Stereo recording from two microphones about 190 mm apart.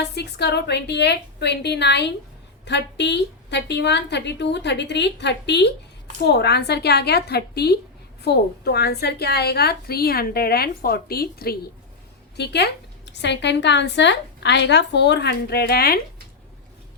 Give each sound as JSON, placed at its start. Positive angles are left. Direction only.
{"t": 0.0, "sound": "a woman's voice", "side_deg": 60}